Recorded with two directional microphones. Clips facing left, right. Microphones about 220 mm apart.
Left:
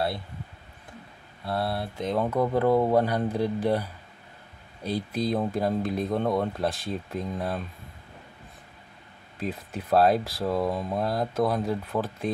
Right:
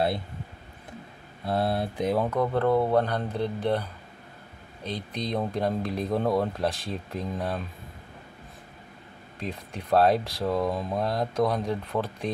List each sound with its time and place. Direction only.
1.4 s speech: 20° right (ahead or behind)
2.1 s speech: 5° left (ahead or behind)
9.4 s speech: 5° left (ahead or behind)